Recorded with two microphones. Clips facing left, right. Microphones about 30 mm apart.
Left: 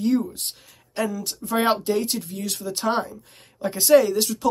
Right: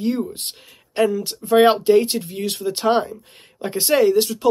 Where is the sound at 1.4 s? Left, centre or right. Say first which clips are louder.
Right 8 dB; centre.